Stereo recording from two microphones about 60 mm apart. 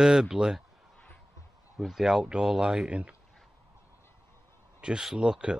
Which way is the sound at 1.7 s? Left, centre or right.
Centre.